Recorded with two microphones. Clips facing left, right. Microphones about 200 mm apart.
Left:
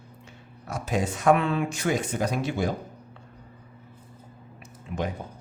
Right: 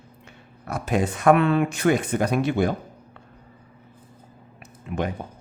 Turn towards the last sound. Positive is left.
turn(degrees=-60)  # may be behind; listen again after turning